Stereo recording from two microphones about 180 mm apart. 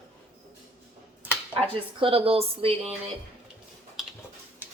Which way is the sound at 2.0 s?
30° right (ahead or behind).